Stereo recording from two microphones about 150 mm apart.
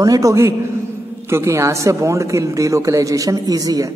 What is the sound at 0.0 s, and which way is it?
A man's voice, 20° right (ahead or behind).